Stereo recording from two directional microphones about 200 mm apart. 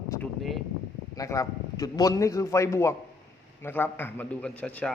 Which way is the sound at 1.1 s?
15° left (ahead or behind).